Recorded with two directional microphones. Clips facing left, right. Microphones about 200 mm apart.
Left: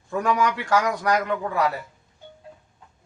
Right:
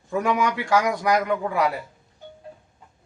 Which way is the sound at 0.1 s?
10° right (ahead or behind).